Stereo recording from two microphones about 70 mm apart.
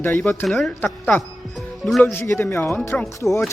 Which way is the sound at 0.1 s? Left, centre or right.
Centre.